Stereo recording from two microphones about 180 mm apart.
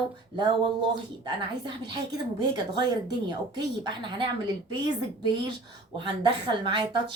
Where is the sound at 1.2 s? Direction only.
25° right (ahead or behind).